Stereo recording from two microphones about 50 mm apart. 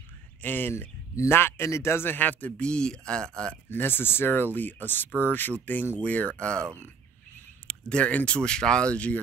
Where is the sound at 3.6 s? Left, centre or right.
Left.